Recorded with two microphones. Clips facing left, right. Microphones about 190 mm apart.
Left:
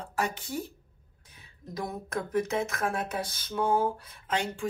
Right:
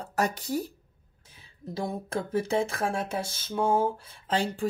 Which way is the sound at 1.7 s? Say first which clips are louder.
Right 3 dB; 30° right (ahead or behind).